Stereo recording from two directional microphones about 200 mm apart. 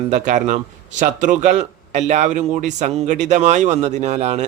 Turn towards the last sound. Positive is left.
turn(degrees=-35)  # may be behind; listen again after turning